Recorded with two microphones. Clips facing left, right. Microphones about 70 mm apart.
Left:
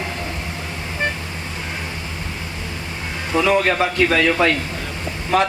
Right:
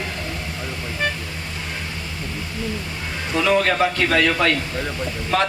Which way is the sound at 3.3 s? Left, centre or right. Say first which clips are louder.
Left 2 dB; centre.